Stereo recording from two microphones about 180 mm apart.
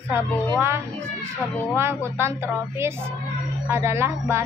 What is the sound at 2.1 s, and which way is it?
Child singing, 15° right (ahead or behind).